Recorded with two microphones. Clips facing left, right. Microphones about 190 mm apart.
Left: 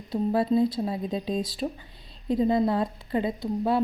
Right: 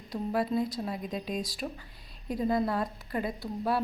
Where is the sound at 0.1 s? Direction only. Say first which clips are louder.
Left 6 dB; 25° left (ahead or behind).